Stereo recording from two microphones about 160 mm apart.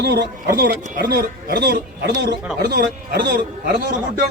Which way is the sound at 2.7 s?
75° right (ahead or behind).